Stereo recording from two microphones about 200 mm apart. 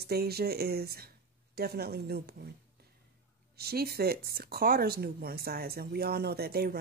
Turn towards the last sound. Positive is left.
turn(degrees=-50)  # may be behind; listen again after turning